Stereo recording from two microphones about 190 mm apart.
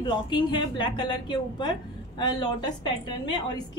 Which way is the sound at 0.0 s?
25° left (ahead or behind).